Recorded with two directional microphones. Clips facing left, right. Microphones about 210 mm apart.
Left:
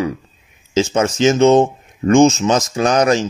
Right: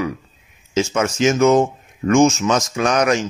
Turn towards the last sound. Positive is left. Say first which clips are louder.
# left 3 dB
turn(degrees=30)  # may be behind; listen again after turning